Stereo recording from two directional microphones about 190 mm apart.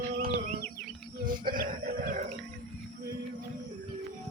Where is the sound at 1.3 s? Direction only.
45° right (ahead or behind).